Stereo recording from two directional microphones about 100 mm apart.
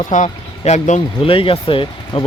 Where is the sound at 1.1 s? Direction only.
65° left (ahead or behind).